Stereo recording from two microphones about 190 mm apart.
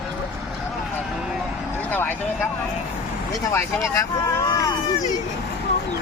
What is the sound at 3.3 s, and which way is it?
Vehicle, 15° left (ahead or behind).